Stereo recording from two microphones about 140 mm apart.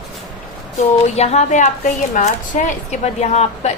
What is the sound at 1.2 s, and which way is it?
A woman's voice, 50° left (ahead or behind).